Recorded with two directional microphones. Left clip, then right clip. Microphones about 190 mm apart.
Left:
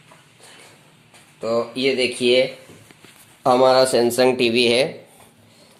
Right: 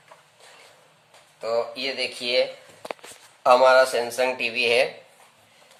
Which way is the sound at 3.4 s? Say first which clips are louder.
Left 1 dB; 40° left (ahead or behind).